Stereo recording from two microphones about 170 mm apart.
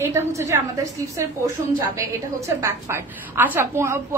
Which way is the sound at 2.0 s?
20° right (ahead or behind).